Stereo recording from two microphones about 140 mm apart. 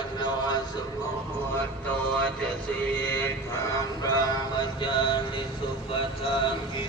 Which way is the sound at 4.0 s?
30° left (ahead or behind).